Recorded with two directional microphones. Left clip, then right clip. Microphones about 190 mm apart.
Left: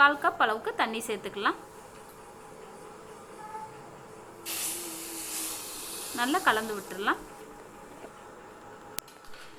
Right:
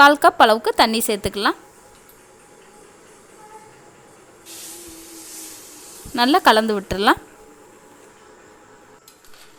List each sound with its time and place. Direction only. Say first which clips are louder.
0.0 s a woman's voice: right 11 dB; 65° right (ahead or behind)
6.1 s a woman's voice: right 12 dB; 60° right (ahead or behind)